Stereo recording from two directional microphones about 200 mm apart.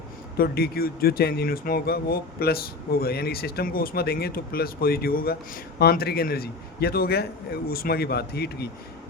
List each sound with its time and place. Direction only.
0.3 s speech: 50° left (ahead or behind)